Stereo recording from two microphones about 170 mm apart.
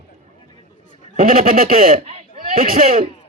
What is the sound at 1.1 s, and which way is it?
Speech, 55° right (ahead or behind).